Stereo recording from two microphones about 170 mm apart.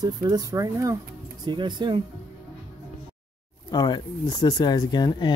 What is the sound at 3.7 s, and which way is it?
Speech, 25° left (ahead or behind).